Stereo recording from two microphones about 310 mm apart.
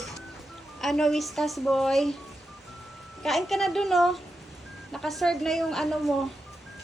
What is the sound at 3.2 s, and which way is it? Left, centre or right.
Speech, centre.